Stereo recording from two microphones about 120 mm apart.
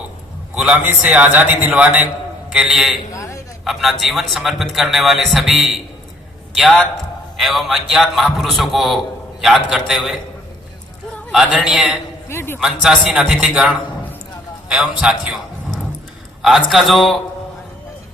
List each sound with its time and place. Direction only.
0.5 s a man's voice: 10° right (ahead or behind)
3.1 s a sound: 25° left (ahead or behind)
3.6 s a man's voice: centre (ahead or behind)
11.3 s a man's voice: centre (ahead or behind)
12.3 s a man's voice: 20° left (ahead or behind)
12.5 s a man's voice: 5° right (ahead or behind)